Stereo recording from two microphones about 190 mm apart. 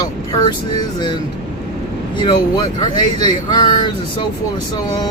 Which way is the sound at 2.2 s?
25° left (ahead or behind).